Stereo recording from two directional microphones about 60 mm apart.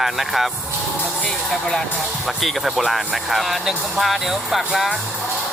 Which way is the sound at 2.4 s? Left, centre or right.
Centre.